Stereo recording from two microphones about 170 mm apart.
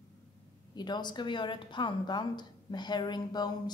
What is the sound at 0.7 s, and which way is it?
A woman's voice, 25° left (ahead or behind).